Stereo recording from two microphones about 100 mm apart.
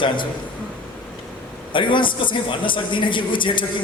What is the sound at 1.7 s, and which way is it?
A man's voice, 55° left (ahead or behind).